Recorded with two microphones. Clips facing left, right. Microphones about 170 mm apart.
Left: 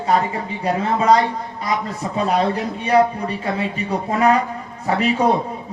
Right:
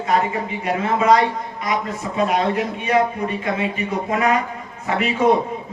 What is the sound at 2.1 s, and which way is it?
Speech, 35° left (ahead or behind).